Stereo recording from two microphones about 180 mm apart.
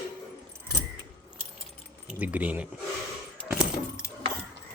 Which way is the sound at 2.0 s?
10° right (ahead or behind).